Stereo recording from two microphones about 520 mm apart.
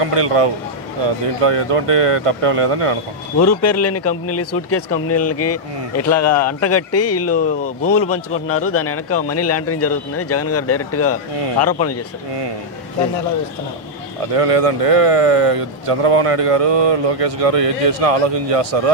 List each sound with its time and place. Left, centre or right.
0.0 s speech: right
3.4 s speech: left
7.3 s speech: centre
8.7 s speech: left
14.3 s speech: right